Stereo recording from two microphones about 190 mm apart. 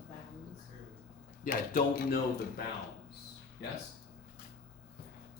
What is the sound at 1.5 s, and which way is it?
Speech, 50° left (ahead or behind).